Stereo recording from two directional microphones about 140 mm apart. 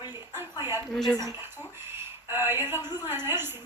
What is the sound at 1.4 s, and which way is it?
Speech, 15° right (ahead or behind).